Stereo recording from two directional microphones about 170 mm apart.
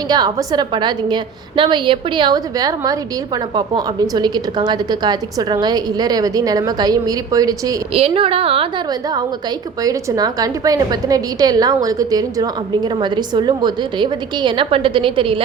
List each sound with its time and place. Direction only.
0.1 s a woman's voice: 25° right (ahead or behind)
7.9 s a woman's voice: 35° right (ahead or behind)